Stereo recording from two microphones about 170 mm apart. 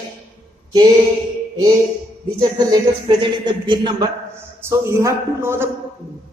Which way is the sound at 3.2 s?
25° right (ahead or behind).